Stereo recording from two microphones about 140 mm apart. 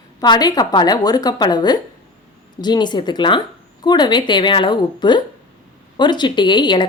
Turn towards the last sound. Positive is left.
turn(degrees=35)  # may be behind; listen again after turning